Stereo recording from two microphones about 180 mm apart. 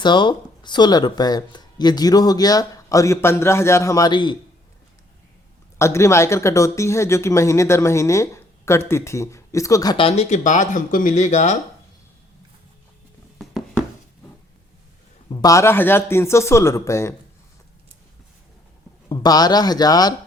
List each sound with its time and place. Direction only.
0.0 s speech: 25° left (ahead or behind)
5.8 s speech: 15° left (ahead or behind)
10.1 s speech: 35° left (ahead or behind)
15.4 s speech: 20° left (ahead or behind)
19.0 s speech: 20° left (ahead or behind)